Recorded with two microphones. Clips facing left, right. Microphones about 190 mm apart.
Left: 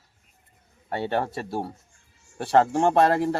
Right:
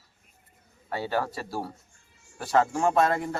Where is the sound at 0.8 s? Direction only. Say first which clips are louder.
Left 2 dB; 25° left (ahead or behind).